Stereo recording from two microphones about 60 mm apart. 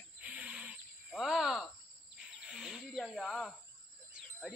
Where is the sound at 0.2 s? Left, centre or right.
Centre.